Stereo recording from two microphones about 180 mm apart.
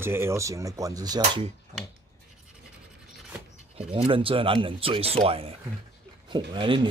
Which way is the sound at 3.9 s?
30° right (ahead or behind).